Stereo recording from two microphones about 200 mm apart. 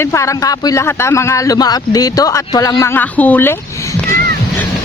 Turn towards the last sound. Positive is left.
turn(degrees=10)  # may be behind; listen again after turning